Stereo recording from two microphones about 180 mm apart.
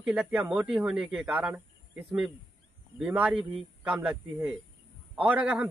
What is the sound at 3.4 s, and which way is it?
Speech, 30° right (ahead or behind).